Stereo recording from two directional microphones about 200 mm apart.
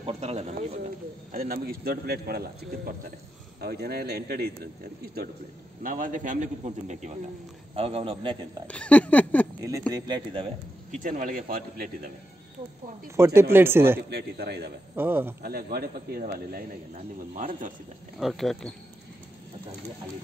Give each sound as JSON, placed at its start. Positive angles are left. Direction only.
{"t": 0.0, "sound": "a man's voice", "side_deg": -30}
{"t": 1.3, "sound": "a man's voice", "side_deg": -45}
{"t": 5.8, "sound": "a man's voice", "side_deg": -40}
{"t": 8.6, "sound": "a sound", "side_deg": 5}
{"t": 9.6, "sound": "a man's voice", "side_deg": -15}
{"t": 10.9, "sound": "a man's voice", "side_deg": -40}
{"t": 13.1, "sound": "speech", "side_deg": -15}
{"t": 14.1, "sound": "a man's voice", "side_deg": -55}
{"t": 15.0, "sound": "speech", "side_deg": -10}
{"t": 15.4, "sound": "a man's voice", "side_deg": -50}
{"t": 18.2, "sound": "speech", "side_deg": 0}